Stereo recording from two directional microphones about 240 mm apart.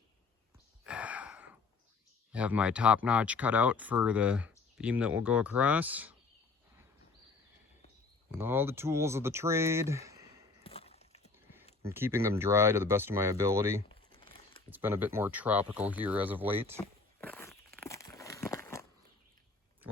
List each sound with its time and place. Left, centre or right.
0.9 s gasp: centre
2.3 s speech: centre
8.4 s speech: centre
10.6 s a sound: left
11.9 s speech: centre
13.8 s crumpling: left
14.7 s speech: centre
17.2 s walk: centre
17.8 s crumpling: centre